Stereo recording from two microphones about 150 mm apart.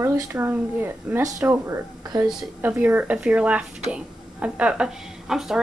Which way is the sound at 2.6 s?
10° right (ahead or behind).